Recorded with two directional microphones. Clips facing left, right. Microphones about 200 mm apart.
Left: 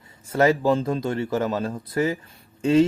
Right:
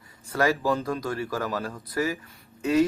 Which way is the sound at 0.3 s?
25° left (ahead or behind).